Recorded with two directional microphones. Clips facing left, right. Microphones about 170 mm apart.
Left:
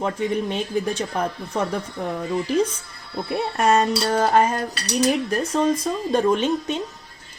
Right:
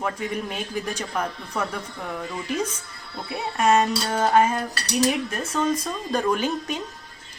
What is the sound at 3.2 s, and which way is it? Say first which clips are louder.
Speech: left 1 dB; 40° left (ahead or behind).